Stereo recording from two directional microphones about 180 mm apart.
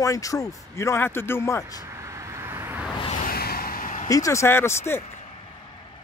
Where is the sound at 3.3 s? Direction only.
55° left (ahead or behind).